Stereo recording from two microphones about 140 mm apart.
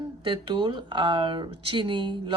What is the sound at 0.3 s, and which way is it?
Speech, 35° right (ahead or behind).